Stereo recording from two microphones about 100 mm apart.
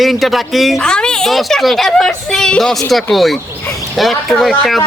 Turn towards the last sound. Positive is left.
turn(degrees=0)  # may be behind; listen again after turning